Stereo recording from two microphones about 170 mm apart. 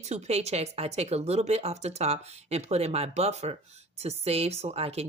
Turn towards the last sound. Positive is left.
turn(degrees=-35)  # may be behind; listen again after turning